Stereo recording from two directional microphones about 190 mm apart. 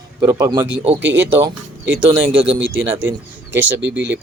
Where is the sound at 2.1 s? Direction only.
30° right (ahead or behind).